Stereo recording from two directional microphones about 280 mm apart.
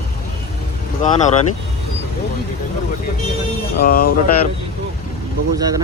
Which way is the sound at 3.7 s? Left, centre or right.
Left.